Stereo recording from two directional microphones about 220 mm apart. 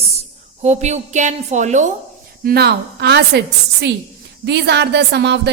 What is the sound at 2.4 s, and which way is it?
A woman's voice, 45° right (ahead or behind).